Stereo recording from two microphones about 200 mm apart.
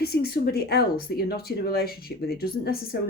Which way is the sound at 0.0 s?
50° left (ahead or behind).